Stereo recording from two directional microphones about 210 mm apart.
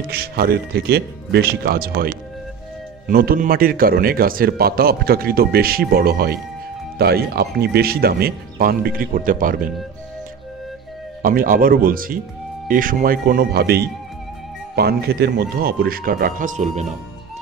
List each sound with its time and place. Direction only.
0.1 s a man's voice: 50° right (ahead or behind)
11.2 s a man's voice: 40° right (ahead or behind)